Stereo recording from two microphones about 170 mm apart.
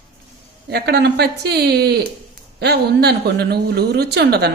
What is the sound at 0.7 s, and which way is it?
A man's voice, 75° right (ahead or behind).